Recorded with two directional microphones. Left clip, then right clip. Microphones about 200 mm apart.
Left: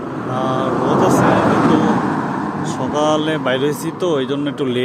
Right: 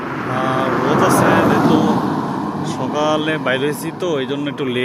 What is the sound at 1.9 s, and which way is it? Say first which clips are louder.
Vehicle: left 1 dB; 10° right (ahead or behind).